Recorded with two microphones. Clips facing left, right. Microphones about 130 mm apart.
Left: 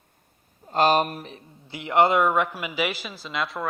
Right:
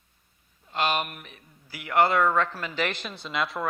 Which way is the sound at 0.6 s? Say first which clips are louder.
Left 7 dB; 40° left (ahead or behind).